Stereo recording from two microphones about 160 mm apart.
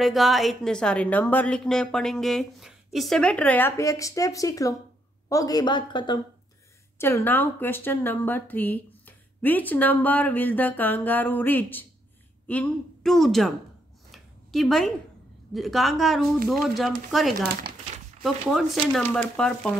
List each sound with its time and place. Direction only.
0.0 s a woman's voice: centre (ahead or behind); by 6.1 s 30° left (ahead or behind)
7.0 s a woman's voice: 15° left (ahead or behind)
14.1 s a sound: centre (ahead or behind)
15.5 s a woman's voice: centre (ahead or behind)